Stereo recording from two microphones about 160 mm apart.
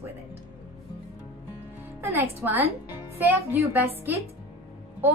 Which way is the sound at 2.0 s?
15° right (ahead or behind).